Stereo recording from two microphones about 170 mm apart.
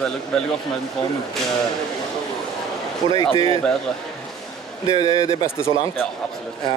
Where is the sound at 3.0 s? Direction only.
30° right (ahead or behind).